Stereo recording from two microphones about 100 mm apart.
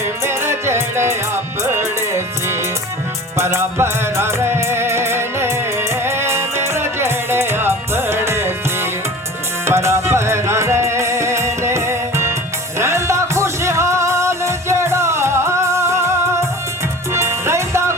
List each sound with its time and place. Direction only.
0.2 s music: 25° right (ahead or behind)